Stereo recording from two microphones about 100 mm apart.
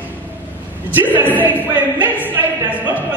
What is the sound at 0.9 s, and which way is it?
Speech, 20° right (ahead or behind).